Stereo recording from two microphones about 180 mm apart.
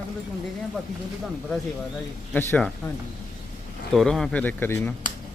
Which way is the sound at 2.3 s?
10° left (ahead or behind).